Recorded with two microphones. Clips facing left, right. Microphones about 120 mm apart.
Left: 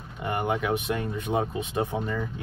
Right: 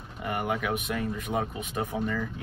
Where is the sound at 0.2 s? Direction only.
30° left (ahead or behind).